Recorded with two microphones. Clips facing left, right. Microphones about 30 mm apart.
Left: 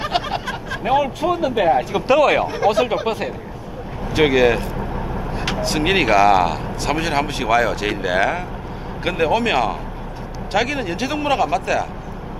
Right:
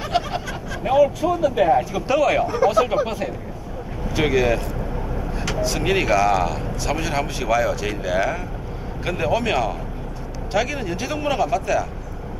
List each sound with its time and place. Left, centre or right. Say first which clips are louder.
0.0 s speech: left 2 dB; left
2.5 s speech: left 1 dB; left
3.1 s speech: left 3 dB; left